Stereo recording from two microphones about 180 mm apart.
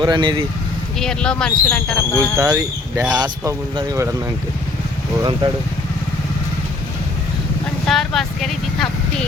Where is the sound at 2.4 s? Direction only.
20° right (ahead or behind).